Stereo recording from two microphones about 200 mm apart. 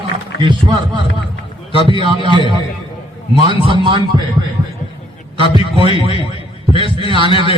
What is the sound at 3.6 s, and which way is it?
Speech, 25° right (ahead or behind).